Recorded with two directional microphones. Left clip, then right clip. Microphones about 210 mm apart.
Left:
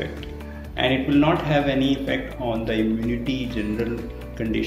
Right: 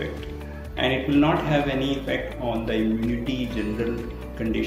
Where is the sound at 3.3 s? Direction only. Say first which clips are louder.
Left 1 dB; 25° left (ahead or behind).